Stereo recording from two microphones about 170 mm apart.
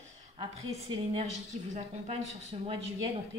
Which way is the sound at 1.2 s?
40° right (ahead or behind).